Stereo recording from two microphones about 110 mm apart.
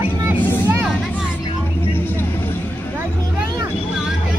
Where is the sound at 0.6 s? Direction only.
15° right (ahead or behind).